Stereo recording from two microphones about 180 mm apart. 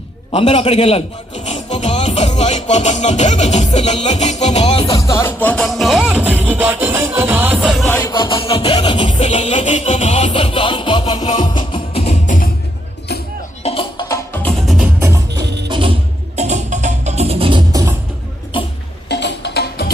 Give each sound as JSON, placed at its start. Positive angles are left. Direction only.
{"t": 0.3, "sound": "a man's voice", "side_deg": 35}
{"t": 1.5, "sound": "music", "side_deg": 40}
{"t": 4.9, "sound": "music", "side_deg": 15}
{"t": 8.0, "sound": "music", "side_deg": 25}
{"t": 9.0, "sound": "music", "side_deg": 35}
{"t": 13.6, "sound": "music", "side_deg": 35}
{"t": 14.4, "sound": "music", "side_deg": 0}
{"t": 15.0, "sound": "music", "side_deg": -20}
{"t": 17.7, "sound": "music", "side_deg": -20}
{"t": 19.0, "sound": "a sound", "side_deg": 70}